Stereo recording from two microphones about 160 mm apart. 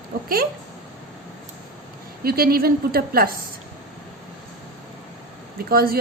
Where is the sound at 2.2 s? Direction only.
70° right (ahead or behind).